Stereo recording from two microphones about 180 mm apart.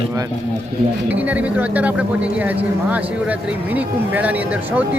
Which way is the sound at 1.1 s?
10° right (ahead or behind).